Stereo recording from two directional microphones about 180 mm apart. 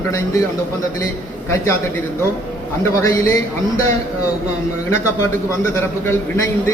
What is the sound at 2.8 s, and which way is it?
A man's voice, 15° left (ahead or behind).